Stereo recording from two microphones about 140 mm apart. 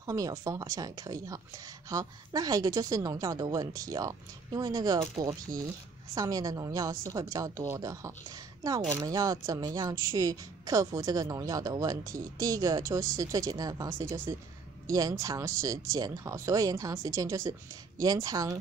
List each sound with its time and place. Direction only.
0.0 s speech: 25° right (ahead or behind)
6.1 s speech: 25° right (ahead or behind)